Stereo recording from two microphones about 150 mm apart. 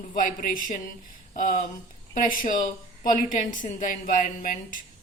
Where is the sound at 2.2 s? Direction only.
65° left (ahead or behind).